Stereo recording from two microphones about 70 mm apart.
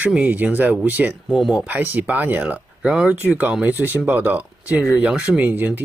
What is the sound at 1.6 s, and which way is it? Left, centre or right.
Speech, right.